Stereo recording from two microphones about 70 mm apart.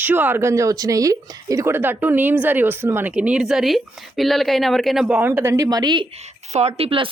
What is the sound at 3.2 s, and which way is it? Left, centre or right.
Speech, centre.